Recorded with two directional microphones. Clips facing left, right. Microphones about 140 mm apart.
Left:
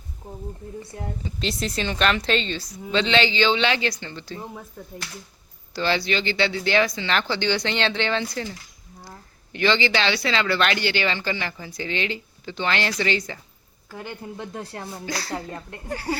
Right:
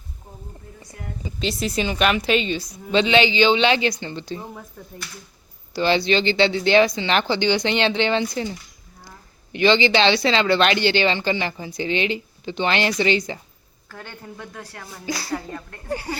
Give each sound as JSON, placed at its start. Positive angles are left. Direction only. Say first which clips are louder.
{"t": 0.8, "sound": "speech", "louder": "left 3 dB", "side_deg": 30}
{"t": 1.2, "sound": "speech", "louder": "right 4 dB", "side_deg": 0}
{"t": 5.7, "sound": "speech", "louder": "right 5 dB", "side_deg": -20}
{"t": 13.8, "sound": "speech", "louder": "left 3 dB", "side_deg": 15}
{"t": 14.3, "sound": "speech", "louder": "left 4 dB", "side_deg": 25}
{"t": 15.0, "sound": "speech", "louder": "right 4 dB", "side_deg": -10}
{"t": 15.3, "sound": "speech", "louder": "right 2 dB", "side_deg": 15}